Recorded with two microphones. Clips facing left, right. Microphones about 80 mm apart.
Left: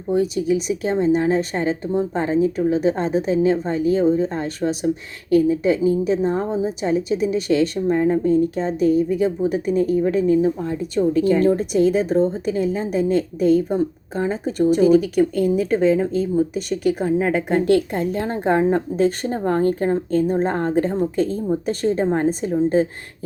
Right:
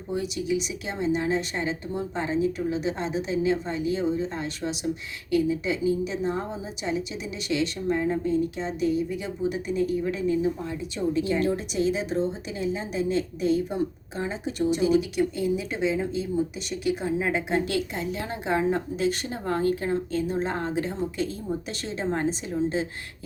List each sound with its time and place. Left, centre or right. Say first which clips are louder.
0.1 s a woman's voice: left 8 dB; left